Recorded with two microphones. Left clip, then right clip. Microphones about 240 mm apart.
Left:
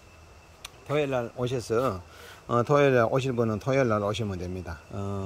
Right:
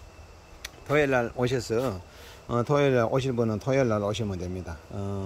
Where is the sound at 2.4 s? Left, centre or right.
Centre.